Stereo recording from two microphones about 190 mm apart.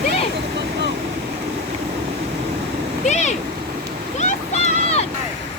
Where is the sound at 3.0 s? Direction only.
40° left (ahead or behind).